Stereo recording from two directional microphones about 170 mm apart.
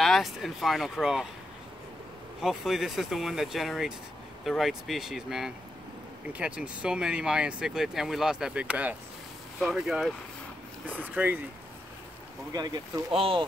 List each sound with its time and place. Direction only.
0.0 s speech: centre (ahead or behind)
2.4 s speech: centre (ahead or behind)
12.5 s speech: 25° right (ahead or behind)